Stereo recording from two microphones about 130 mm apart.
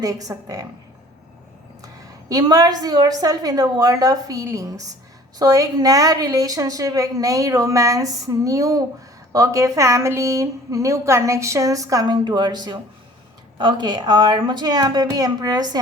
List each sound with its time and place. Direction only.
0.0 s a woman's voice: 25° right (ahead or behind)
2.3 s a woman's voice: 30° right (ahead or behind)